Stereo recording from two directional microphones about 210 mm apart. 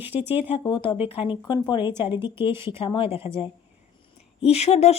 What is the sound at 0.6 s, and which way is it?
Speech, 20° left (ahead or behind).